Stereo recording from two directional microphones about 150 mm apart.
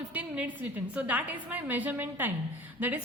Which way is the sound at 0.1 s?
10° right (ahead or behind).